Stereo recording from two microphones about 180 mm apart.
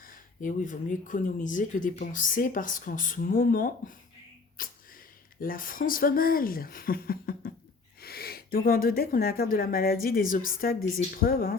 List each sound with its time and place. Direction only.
0.4 s speech: 45° left (ahead or behind)
4.6 s a sound: 50° left (ahead or behind)
5.4 s a woman's voice: 50° left (ahead or behind)